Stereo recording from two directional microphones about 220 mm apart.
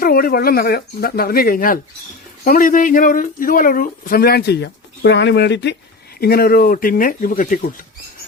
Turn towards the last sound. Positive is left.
turn(degrees=40)  # may be behind; listen again after turning